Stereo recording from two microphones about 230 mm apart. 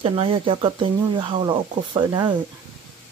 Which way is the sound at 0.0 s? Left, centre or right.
Right.